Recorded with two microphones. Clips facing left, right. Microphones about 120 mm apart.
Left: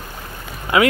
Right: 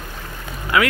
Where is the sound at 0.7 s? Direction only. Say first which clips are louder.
Left 3 dB; 25° left (ahead or behind).